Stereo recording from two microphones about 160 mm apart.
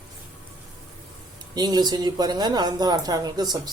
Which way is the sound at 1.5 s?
25° right (ahead or behind).